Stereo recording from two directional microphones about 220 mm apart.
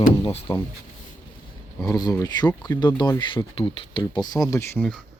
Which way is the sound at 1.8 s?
15° left (ahead or behind).